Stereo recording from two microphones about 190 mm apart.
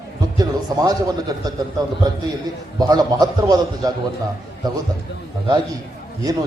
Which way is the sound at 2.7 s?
20° right (ahead or behind).